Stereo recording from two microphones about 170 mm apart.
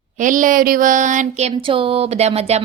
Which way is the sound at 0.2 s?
50° right (ahead or behind).